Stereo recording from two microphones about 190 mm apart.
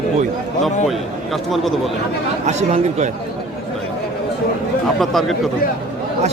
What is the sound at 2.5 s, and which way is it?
Speech, 35° right (ahead or behind).